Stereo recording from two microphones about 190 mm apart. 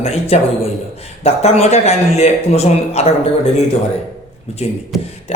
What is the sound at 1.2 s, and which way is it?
Speech, 35° left (ahead or behind).